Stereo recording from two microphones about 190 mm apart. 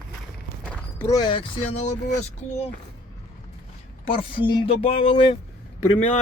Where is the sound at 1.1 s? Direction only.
25° left (ahead or behind).